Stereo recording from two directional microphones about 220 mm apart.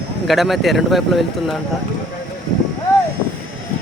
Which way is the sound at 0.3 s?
Centre (ahead or behind).